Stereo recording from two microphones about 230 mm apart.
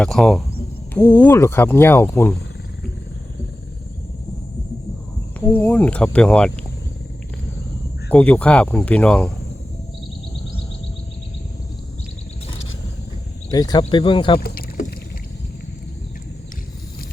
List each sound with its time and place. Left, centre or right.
0.0 s speech: centre
5.5 s speech: centre
8.1 s speech: centre
13.5 s speech: centre
14.3 s rowboat: left